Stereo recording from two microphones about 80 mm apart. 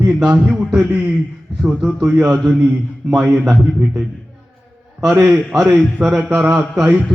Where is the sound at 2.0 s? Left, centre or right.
Centre.